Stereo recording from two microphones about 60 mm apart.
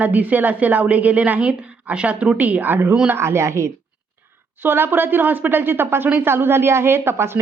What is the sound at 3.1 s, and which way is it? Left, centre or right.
Speech, right.